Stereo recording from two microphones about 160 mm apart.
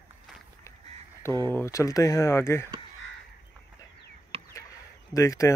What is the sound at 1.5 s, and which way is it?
Speech, 15° left (ahead or behind).